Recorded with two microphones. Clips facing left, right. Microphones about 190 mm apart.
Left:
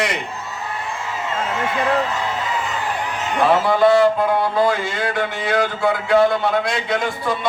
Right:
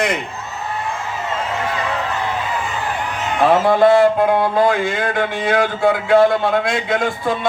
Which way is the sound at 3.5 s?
50° right (ahead or behind).